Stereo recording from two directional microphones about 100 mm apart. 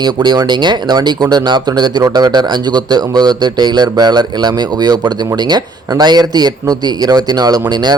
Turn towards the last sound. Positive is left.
turn(degrees=-45)  # may be behind; listen again after turning